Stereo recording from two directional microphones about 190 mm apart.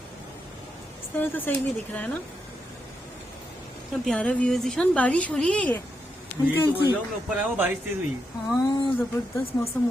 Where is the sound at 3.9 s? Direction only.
Centre (ahead or behind).